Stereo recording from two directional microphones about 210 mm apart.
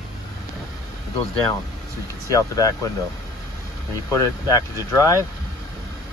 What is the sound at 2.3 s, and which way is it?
Speech, 15° left (ahead or behind).